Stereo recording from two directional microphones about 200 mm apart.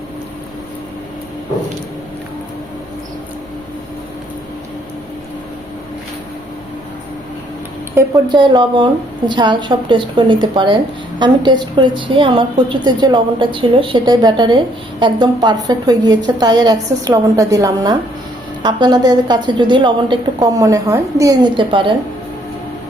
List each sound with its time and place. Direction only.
7.9 s a woman's voice: 20° right (ahead or behind)